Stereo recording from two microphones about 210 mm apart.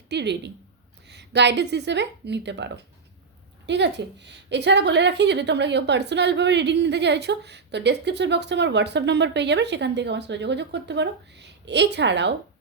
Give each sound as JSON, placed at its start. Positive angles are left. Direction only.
{"t": 0.1, "sound": "a woman's voice", "side_deg": -55}